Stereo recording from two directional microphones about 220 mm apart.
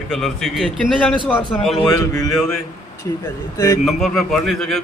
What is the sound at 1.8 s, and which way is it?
Speech, 15° left (ahead or behind).